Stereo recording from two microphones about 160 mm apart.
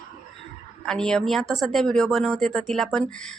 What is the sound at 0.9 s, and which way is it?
Speech, 5° left (ahead or behind).